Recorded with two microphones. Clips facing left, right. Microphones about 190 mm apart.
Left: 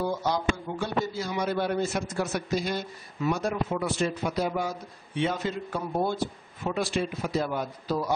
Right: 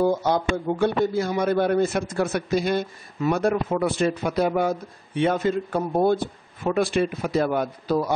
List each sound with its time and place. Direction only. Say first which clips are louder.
0.0 s a man's voice: right 6 dB; 50° right (ahead or behind)